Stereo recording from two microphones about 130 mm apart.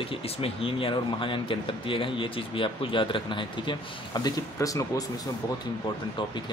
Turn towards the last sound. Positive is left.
turn(degrees=25)  # may be behind; listen again after turning